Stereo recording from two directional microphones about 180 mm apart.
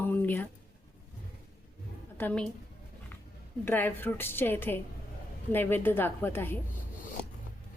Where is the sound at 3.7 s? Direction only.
10° left (ahead or behind).